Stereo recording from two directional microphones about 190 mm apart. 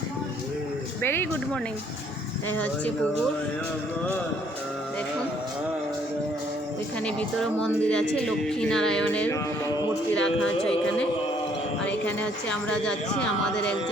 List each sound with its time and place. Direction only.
1.0 s speech: 10° left (ahead or behind)
2.5 s speech: 5° left (ahead or behind)
7.0 s a woman's voice: 5° left (ahead or behind)
9.6 s music: 20° left (ahead or behind)
12.0 s a woman's voice: 5° left (ahead or behind)